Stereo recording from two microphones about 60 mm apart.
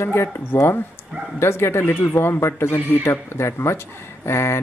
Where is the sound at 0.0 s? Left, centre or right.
Left.